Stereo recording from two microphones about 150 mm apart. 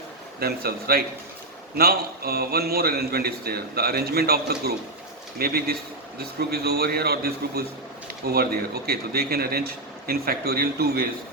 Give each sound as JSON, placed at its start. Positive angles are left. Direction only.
{"t": 0.3, "sound": "a man's voice", "side_deg": -90}